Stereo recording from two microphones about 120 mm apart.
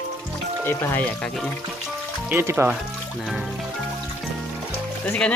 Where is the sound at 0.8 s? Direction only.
15° left (ahead or behind).